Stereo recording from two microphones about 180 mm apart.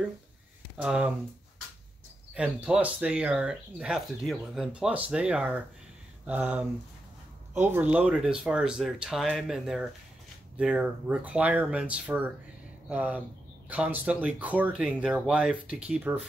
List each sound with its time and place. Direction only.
0.7 s speech: 5° right (ahead or behind)
2.3 s speech: 5° right (ahead or behind)